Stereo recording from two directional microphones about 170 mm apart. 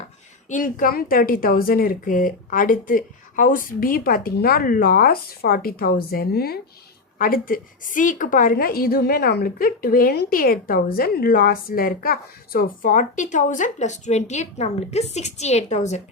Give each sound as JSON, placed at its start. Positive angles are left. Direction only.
{"t": 0.5, "sound": "a woman's voice", "side_deg": 50}